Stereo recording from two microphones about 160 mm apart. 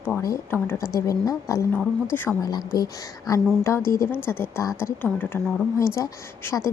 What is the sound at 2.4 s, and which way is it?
A woman's voice, 25° left (ahead or behind).